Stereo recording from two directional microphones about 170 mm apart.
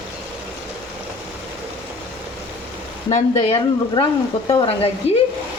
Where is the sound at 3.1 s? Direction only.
40° left (ahead or behind).